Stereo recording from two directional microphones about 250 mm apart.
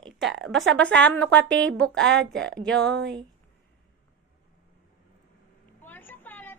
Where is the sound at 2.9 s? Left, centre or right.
Right.